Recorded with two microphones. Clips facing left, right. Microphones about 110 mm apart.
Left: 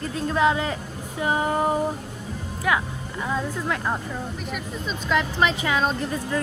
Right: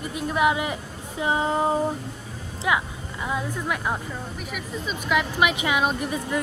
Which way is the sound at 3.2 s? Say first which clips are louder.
Left 1 dB; 15° right (ahead or behind).